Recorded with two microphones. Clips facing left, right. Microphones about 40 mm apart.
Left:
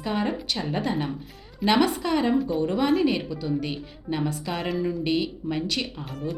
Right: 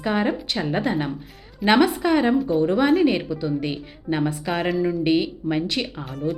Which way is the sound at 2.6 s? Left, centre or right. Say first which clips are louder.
Right 6 dB; right.